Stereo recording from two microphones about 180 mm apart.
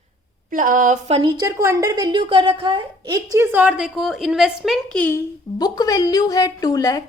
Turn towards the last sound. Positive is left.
turn(degrees=20)  # may be behind; listen again after turning